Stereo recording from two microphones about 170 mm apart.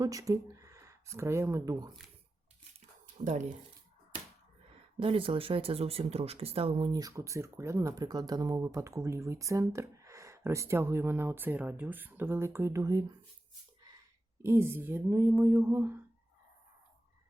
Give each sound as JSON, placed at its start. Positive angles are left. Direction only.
{"t": 0.0, "sound": "speech", "side_deg": -20}
{"t": 3.2, "sound": "speech", "side_deg": -40}
{"t": 4.9, "sound": "speech", "side_deg": -30}
{"t": 14.4, "sound": "speech", "side_deg": -15}